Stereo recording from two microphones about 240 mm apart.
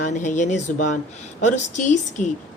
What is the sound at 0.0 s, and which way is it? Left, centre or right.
A woman's voice, left.